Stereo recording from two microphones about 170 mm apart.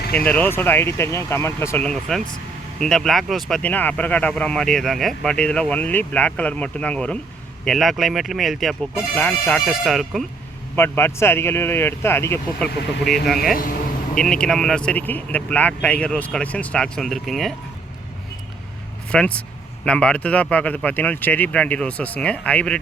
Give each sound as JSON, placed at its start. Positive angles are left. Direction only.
{"t": 0.0, "sound": "a sound", "side_deg": 65}
{"t": 0.3, "sound": "speech", "side_deg": 10}
{"t": 10.8, "sound": "speech", "side_deg": 15}
{"t": 19.1, "sound": "speech", "side_deg": 5}